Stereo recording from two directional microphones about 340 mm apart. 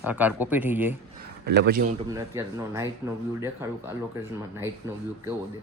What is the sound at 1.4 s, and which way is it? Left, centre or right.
Speech, right.